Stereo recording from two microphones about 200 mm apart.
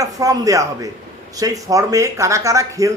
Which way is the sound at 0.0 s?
15° right (ahead or behind).